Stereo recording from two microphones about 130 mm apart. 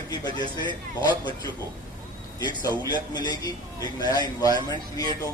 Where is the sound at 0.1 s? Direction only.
35° left (ahead or behind).